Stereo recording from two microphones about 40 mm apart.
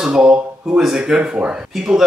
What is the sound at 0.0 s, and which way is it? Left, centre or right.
Speech, right.